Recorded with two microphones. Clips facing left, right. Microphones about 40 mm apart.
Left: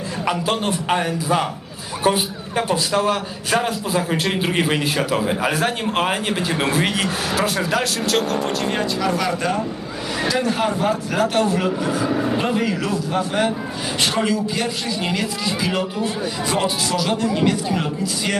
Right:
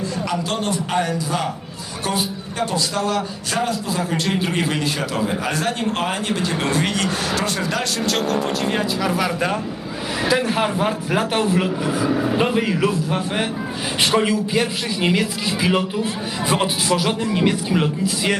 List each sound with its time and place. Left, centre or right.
0.3 s a man's voice: centre
12.4 s speech: centre